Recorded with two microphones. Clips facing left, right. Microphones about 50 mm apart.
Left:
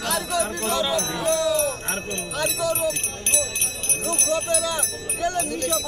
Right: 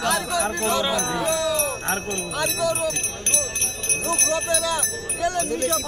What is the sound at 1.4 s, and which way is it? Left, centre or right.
Speech, centre.